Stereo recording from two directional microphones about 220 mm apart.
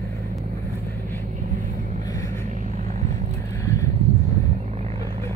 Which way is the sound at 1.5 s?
35° right (ahead or behind).